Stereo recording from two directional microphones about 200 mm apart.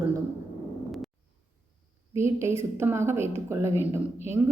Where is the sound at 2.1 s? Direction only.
15° right (ahead or behind).